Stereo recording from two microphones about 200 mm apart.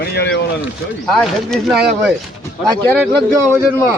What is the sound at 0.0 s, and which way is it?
Speech, 55° left (ahead or behind).